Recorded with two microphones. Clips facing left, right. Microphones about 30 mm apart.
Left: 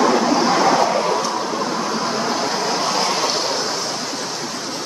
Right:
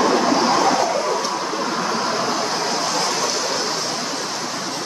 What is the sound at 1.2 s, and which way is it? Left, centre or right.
Vehicle, centre.